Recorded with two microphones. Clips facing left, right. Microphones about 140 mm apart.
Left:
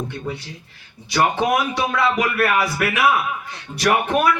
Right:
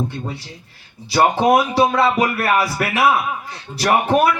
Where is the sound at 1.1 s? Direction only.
35° right (ahead or behind).